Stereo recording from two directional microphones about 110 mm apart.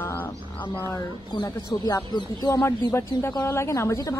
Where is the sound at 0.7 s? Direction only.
30° left (ahead or behind).